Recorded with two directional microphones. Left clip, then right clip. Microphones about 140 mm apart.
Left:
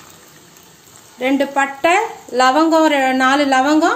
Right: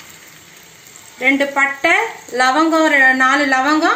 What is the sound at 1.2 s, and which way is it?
Speech, 45° left (ahead or behind).